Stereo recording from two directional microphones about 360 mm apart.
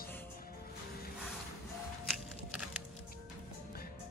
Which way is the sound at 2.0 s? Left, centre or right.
Centre.